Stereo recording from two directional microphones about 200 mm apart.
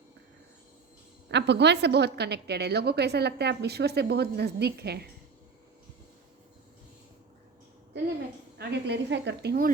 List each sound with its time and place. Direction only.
1.3 s a woman's voice: 60° right (ahead or behind)
8.5 s a woman's voice: 55° right (ahead or behind)